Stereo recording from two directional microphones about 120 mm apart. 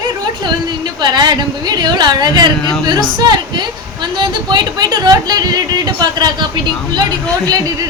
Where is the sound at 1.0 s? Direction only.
35° right (ahead or behind).